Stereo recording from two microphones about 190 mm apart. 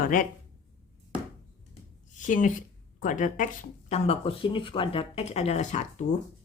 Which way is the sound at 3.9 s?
30° left (ahead or behind).